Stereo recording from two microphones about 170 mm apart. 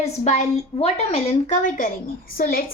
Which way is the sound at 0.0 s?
40° left (ahead or behind).